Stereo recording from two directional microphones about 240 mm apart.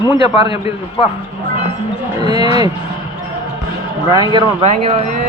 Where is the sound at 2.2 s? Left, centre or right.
Centre.